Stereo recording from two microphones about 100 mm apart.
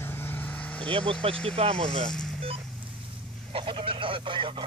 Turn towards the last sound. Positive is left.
turn(degrees=-55)  # may be behind; listen again after turning